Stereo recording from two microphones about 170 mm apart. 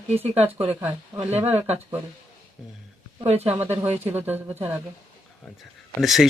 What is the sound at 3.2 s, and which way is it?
Speech, 35° right (ahead or behind).